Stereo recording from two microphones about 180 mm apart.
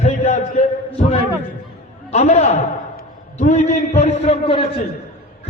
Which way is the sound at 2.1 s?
40° left (ahead or behind).